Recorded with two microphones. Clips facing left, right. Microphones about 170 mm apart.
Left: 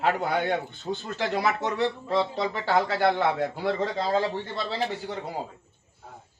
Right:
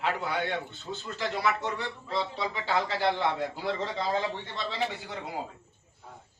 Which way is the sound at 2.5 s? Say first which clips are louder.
Left 5 dB; 50° left (ahead or behind).